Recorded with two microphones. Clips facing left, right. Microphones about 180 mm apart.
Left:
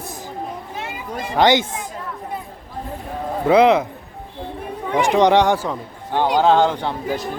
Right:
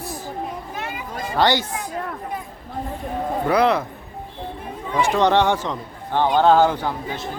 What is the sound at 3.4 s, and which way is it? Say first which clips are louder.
Speech: left 6 dB; 20° left (ahead or behind).